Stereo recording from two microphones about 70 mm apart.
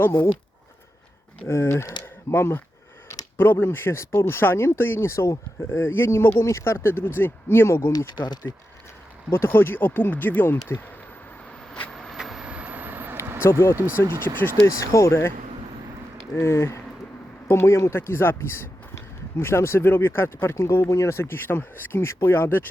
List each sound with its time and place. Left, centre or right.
1.5 s speech: left
7.9 s speech: left
9.3 s speech: left
11.9 s vehicle: centre
12.5 s vehicle: centre
13.4 s speech: left
13.7 s speech: right
14.8 s speech: left
16.3 s speech: left